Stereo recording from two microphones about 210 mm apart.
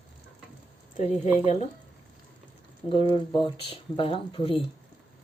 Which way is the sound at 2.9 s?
25° left (ahead or behind).